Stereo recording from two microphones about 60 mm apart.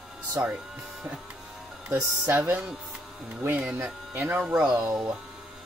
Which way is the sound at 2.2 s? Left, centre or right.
Right.